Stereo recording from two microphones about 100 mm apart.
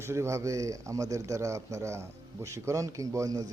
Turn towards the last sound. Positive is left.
turn(degrees=-35)  # may be behind; listen again after turning